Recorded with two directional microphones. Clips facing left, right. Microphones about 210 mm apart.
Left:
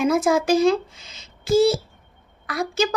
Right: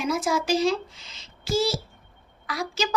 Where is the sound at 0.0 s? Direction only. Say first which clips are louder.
Left 7 dB; 55° left (ahead or behind).